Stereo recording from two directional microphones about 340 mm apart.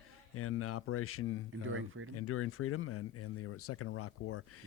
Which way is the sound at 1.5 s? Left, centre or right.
Right.